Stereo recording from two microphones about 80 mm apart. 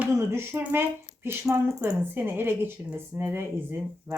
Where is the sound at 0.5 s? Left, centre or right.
Right.